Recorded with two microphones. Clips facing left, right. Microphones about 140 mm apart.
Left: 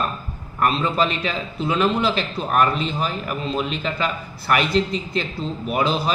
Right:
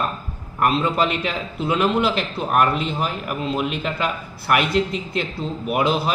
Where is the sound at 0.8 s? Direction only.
15° right (ahead or behind).